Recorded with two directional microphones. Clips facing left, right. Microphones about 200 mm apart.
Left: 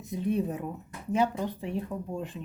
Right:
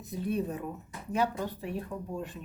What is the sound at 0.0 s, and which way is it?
Speech, 15° left (ahead or behind).